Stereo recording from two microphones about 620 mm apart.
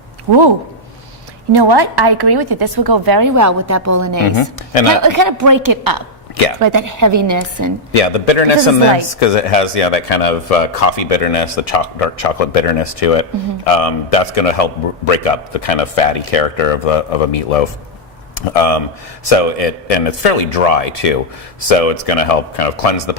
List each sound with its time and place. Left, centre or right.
1.5 s speech: right
4.4 s a man's voice: left
5.0 s a woman's voice: right
6.3 s speech: left
6.6 s a woman's voice: right
7.9 s a man's voice: left